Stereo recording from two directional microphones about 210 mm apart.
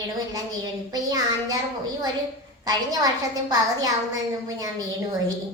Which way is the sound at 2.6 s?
20° right (ahead or behind).